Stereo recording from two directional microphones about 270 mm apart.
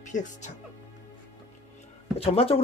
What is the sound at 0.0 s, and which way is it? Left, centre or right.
Speech, left.